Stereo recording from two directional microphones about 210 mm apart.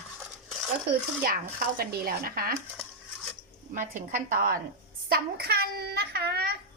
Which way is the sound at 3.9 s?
40° right (ahead or behind).